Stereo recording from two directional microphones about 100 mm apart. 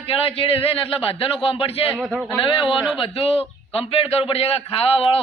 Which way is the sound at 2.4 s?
60° left (ahead or behind).